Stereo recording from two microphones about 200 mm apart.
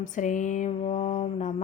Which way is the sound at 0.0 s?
40° left (ahead or behind).